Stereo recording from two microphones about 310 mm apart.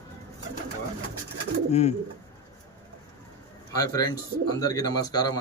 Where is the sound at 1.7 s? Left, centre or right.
Left.